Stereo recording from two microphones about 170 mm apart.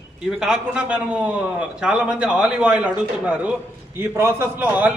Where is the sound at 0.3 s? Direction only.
5° right (ahead or behind).